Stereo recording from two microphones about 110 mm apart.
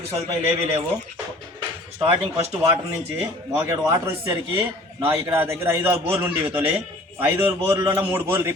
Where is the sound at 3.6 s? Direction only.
30° right (ahead or behind).